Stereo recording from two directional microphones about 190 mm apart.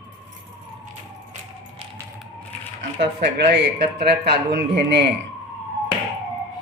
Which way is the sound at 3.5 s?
60° right (ahead or behind).